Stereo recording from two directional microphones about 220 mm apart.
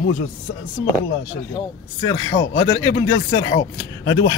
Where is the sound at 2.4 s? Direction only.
55° left (ahead or behind).